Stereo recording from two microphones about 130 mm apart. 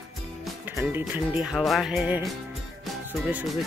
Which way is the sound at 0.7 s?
15° right (ahead or behind).